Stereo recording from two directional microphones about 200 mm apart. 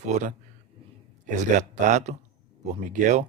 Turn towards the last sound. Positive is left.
turn(degrees=-35)  # may be behind; listen again after turning